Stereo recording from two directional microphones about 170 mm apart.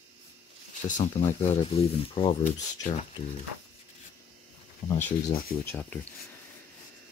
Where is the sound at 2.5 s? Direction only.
45° left (ahead or behind).